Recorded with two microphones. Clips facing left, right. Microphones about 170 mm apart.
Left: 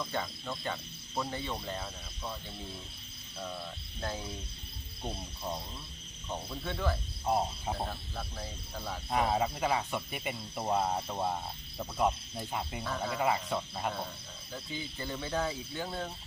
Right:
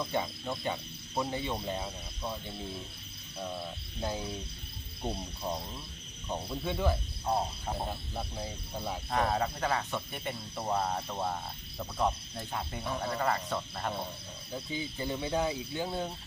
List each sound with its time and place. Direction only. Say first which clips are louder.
0.0 s speech: right 3 dB; 20° right (ahead or behind)
4.0 s speech: right 3 dB; 15° right (ahead or behind)
7.3 s speech: left 1 dB; 5° left (ahead or behind)
7.9 s speech: right 3 dB; 20° right (ahead or behind)
9.0 s speech: left 1 dB; 10° left (ahead or behind)
14.5 s speech: right 4 dB; 15° right (ahead or behind)